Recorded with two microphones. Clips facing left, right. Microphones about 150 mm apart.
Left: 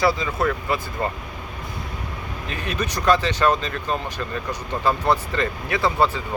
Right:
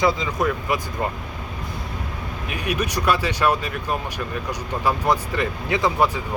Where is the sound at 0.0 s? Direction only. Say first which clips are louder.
Even; 20° right (ahead or behind).